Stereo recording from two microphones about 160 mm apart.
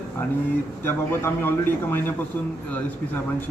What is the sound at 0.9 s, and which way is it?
A man's voice, 15° left (ahead or behind).